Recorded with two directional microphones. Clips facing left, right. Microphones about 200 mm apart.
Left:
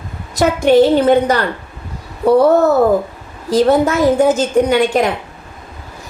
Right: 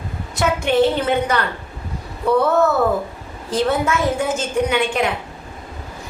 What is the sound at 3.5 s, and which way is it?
A woman's voice, 40° left (ahead or behind).